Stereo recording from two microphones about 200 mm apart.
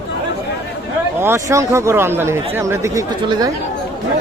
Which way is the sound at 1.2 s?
15° right (ahead or behind).